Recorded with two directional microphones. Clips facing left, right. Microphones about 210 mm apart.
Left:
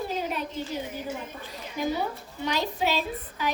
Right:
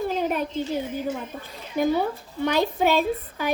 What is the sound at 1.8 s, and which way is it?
A woman's voice, 55° right (ahead or behind).